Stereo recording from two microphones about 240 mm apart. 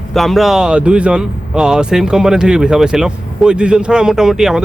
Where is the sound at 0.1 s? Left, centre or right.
Centre.